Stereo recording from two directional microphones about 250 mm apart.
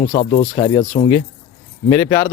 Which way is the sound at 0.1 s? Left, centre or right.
Left.